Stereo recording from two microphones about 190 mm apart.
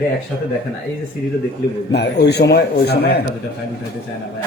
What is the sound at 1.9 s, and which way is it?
Speech, 60° left (ahead or behind).